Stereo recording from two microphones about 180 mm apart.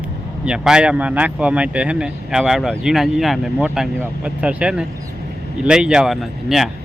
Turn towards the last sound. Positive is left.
turn(degrees=0)  # may be behind; listen again after turning